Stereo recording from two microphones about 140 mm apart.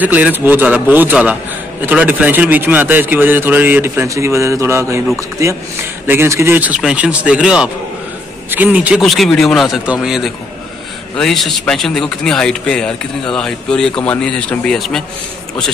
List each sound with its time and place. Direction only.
0.0 s a man's voice: 10° right (ahead or behind)
9.0 s speech: centre (ahead or behind)